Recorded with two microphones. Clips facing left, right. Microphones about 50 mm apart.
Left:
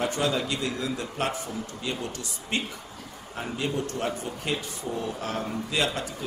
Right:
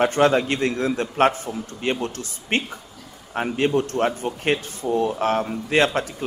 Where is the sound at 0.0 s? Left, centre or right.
Right.